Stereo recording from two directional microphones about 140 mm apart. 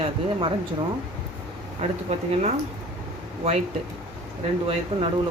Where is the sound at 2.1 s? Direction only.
50° right (ahead or behind).